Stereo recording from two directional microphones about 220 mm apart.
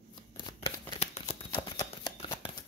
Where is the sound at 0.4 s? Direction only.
20° left (ahead or behind).